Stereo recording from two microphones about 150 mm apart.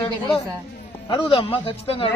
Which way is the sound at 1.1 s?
35° left (ahead or behind).